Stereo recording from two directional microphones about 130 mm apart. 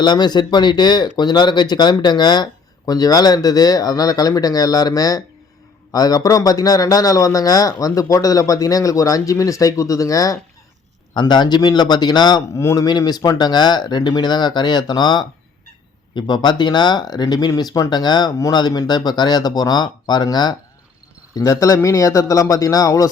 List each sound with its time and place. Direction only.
0.0 s a man's voice: 35° left (ahead or behind)